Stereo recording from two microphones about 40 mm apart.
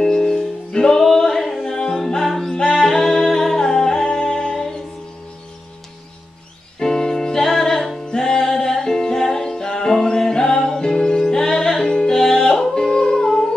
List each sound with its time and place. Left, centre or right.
0.0 s music: centre
6.8 s music: centre
12.4 s yodeling: centre
12.7 s music: centre